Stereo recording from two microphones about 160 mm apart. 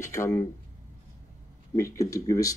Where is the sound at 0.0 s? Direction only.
20° left (ahead or behind).